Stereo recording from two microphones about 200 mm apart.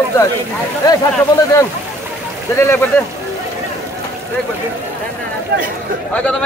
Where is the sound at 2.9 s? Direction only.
10° left (ahead or behind).